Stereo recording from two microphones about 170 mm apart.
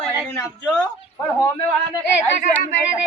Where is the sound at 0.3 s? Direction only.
15° left (ahead or behind).